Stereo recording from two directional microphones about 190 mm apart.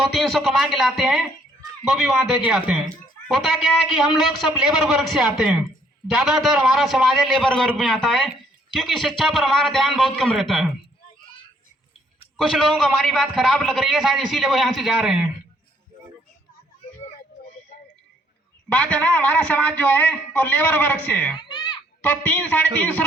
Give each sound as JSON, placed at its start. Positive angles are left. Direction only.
{"t": 0.2, "sound": "a man's voice", "side_deg": 0}
{"t": 12.4, "sound": "a man's voice", "side_deg": 0}
{"t": 18.7, "sound": "a man's voice", "side_deg": 5}
{"t": 21.4, "sound": "a sound", "side_deg": 25}
{"t": 22.0, "sound": "a man's voice", "side_deg": 10}